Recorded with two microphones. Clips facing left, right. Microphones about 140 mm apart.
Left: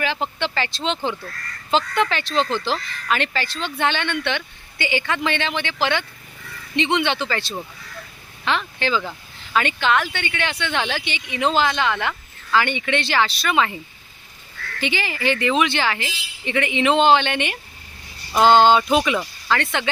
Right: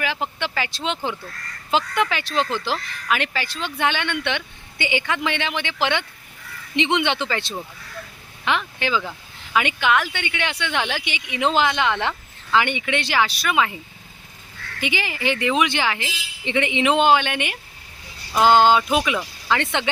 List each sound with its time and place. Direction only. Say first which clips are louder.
0.0 s speech: left 2 dB; 5° right (ahead or behind)
14.8 s speech: left 1 dB; 15° right (ahead or behind)
19.5 s speech: right 1 dB; 20° right (ahead or behind)